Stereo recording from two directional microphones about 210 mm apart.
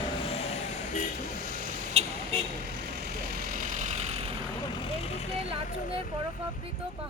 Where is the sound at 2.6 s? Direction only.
50° right (ahead or behind); by 4.3 s 30° right (ahead or behind).